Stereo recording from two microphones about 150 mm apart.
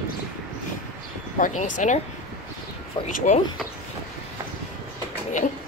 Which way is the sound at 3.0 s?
50° left (ahead or behind).